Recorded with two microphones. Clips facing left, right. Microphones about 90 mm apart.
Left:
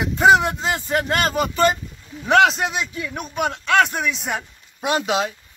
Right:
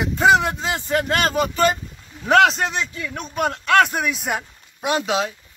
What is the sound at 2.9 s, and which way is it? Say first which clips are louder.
Speech: left 1 dB; 15° left (ahead or behind).